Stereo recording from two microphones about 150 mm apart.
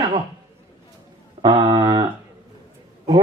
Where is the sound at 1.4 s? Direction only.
30° right (ahead or behind).